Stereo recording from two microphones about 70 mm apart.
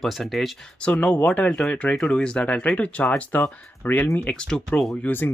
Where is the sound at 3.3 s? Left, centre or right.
Left.